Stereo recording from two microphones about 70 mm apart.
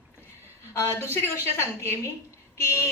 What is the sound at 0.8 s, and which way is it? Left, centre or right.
A woman's voice, left.